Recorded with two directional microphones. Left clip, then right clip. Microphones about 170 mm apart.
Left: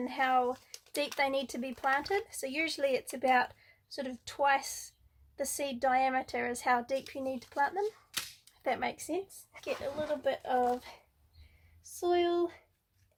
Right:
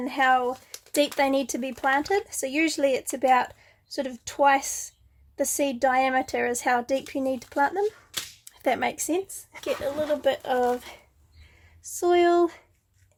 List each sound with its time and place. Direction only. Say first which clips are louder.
0.0 s a woman's voice: right 7 dB; 45° right (ahead or behind)